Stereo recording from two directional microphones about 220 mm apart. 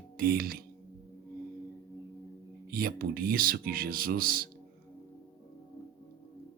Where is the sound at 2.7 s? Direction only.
40° right (ahead or behind).